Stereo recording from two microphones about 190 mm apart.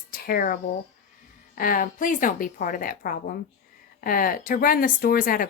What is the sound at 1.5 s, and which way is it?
Speech, 45° left (ahead or behind).